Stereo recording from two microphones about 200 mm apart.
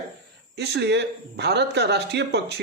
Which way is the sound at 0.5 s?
55° right (ahead or behind).